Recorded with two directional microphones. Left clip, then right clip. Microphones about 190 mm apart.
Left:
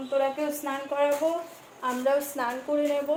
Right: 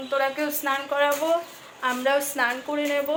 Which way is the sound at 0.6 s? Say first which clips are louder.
Right 4 dB; 5° left (ahead or behind).